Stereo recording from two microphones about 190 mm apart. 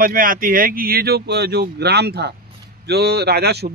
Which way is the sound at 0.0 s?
45° right (ahead or behind).